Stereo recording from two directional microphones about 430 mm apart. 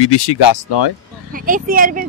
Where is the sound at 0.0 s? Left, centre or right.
Left.